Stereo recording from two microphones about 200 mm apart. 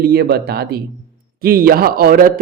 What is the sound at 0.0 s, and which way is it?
A man's voice, 50° right (ahead or behind).